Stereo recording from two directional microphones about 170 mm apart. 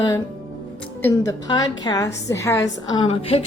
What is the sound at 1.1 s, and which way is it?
A woman's voice, 20° left (ahead or behind).